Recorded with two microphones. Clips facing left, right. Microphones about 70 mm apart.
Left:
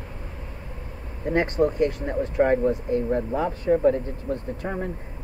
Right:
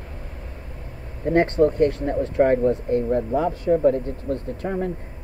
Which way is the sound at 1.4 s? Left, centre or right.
Centre.